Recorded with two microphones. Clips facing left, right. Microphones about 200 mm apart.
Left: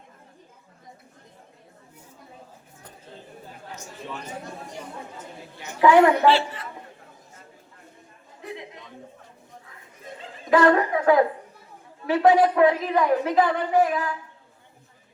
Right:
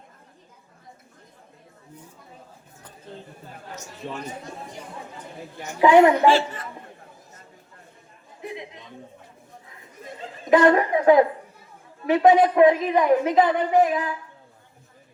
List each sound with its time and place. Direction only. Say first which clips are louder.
5.8 s a woman's voice: right 1 dB; 20° right (ahead or behind)
6.2 s a woman's voice: right 1 dB; 45° right (ahead or behind)
10.5 s a woman's voice: right 2 dB; 20° right (ahead or behind)